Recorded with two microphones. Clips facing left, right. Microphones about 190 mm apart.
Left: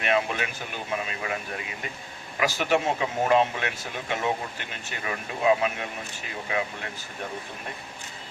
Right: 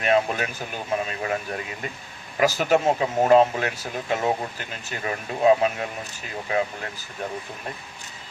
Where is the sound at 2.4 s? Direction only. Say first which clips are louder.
Right 4 dB; 40° right (ahead or behind).